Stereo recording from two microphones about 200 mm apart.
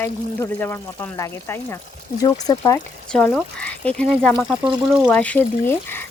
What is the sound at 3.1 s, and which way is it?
Speech, 5° left (ahead or behind).